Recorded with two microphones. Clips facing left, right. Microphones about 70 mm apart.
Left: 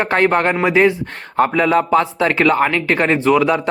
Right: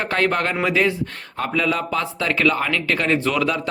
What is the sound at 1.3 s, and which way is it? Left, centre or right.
Speech, left.